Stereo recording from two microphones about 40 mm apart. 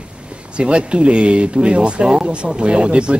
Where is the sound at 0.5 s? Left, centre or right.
Right.